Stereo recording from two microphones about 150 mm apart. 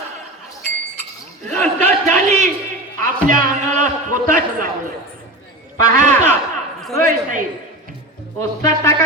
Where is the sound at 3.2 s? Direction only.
65° right (ahead or behind).